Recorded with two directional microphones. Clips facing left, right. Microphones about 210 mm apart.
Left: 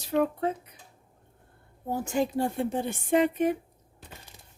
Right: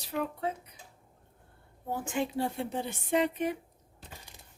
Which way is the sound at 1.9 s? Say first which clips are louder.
Left 5 dB; 40° left (ahead or behind).